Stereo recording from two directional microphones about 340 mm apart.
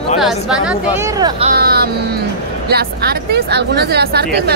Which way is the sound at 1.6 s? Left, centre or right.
Right.